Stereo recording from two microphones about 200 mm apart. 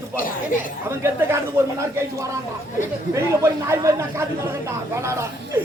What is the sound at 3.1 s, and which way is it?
Speech, 15° right (ahead or behind).